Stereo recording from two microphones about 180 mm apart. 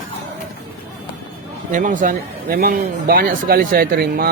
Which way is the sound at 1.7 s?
45° right (ahead or behind).